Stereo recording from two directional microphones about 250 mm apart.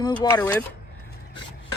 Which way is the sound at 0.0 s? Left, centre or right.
Centre.